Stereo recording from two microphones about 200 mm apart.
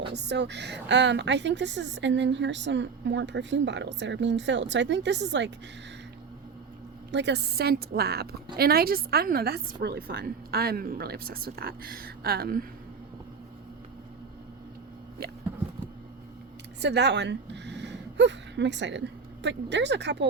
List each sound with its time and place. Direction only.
0.1 s a woman's voice: 60° right (ahead or behind)
7.1 s a woman's voice: 60° right (ahead or behind)
15.2 s a sound: 50° right (ahead or behind)
16.8 s speech: 60° right (ahead or behind)